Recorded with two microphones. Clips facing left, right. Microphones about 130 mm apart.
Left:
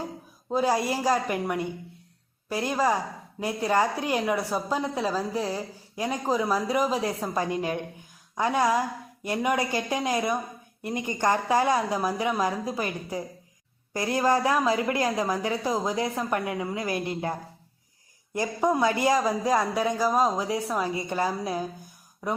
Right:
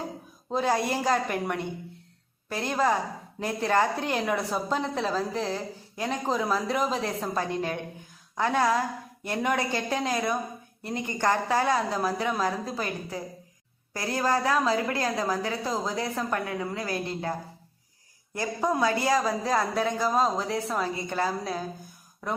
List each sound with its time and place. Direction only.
0.5 s a woman's voice: 5° left (ahead or behind)
18.3 s a woman's voice: 15° left (ahead or behind)